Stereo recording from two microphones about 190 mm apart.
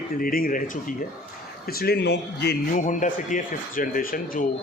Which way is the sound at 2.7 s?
40° left (ahead or behind).